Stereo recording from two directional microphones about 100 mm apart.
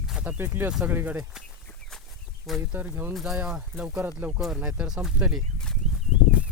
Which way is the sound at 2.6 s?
20° right (ahead or behind).